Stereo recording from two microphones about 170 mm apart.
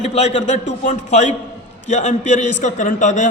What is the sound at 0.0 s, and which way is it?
A man's voice, 40° left (ahead or behind).